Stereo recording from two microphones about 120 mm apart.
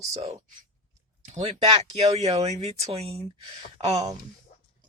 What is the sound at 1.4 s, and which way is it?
Speech, 55° right (ahead or behind).